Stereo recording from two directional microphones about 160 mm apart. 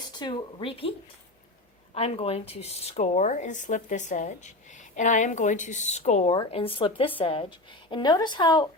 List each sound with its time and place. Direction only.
0.1 s speech: 30° left (ahead or behind)
2.0 s a woman's voice: 40° left (ahead or behind)